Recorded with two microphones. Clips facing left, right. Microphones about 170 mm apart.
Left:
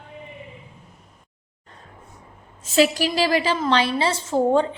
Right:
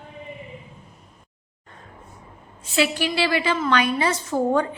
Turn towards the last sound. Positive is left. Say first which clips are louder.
# left 2 dB
turn(degrees=25)  # may be behind; listen again after turning